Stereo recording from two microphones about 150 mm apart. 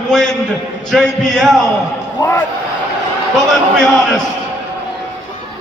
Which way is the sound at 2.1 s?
20° left (ahead or behind).